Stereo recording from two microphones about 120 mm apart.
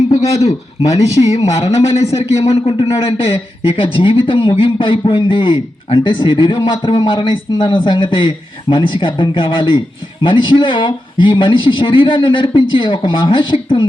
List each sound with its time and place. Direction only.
0.3 s a man's voice: 60° left (ahead or behind); by 13.8 s 45° left (ahead or behind)